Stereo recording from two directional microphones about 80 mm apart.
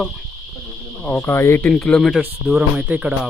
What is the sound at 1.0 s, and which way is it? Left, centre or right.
Cricket, centre.